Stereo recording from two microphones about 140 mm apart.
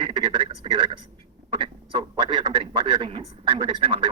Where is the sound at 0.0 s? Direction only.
40° right (ahead or behind).